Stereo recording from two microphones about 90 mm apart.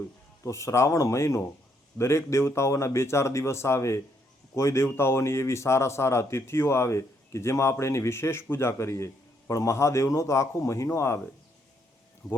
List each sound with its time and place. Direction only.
0.4 s speech: 35° left (ahead or behind)
12.2 s speech: 5° left (ahead or behind)